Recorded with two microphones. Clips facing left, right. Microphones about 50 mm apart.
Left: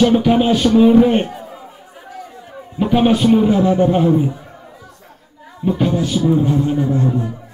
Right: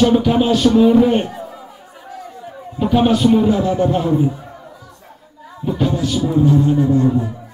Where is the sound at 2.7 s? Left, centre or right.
Centre.